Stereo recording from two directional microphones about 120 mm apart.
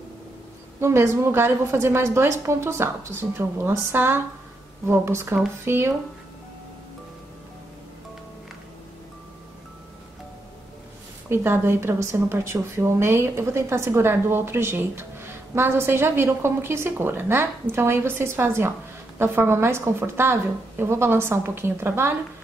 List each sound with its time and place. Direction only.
0.7 s speech: 25° right (ahead or behind)
11.2 s speech: 20° right (ahead or behind)